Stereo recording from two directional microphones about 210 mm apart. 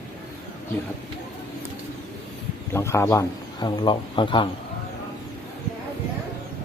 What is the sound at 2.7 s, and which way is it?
Speech, 10° left (ahead or behind).